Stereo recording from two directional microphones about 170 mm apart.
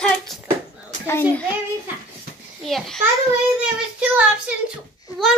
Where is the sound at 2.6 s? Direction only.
Centre (ahead or behind).